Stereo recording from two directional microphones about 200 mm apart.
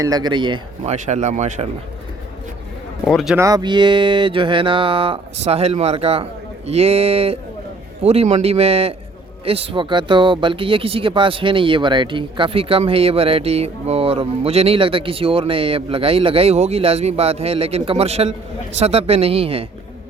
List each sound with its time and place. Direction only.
0.0 s speech: 20° right (ahead or behind)
0.9 s speech: 35° right (ahead or behind)
3.1 s speech: centre (ahead or behind)
3.3 s speech: 15° right (ahead or behind)